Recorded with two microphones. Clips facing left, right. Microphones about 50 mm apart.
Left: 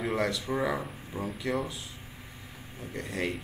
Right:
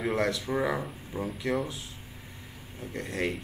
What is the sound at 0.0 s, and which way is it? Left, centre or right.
Speech, centre.